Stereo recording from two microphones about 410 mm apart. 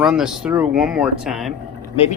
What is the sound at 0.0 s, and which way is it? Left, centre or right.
Speech, centre.